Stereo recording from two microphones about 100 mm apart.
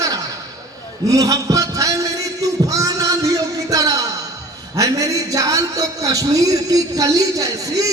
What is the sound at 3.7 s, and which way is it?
Music, 35° right (ahead or behind).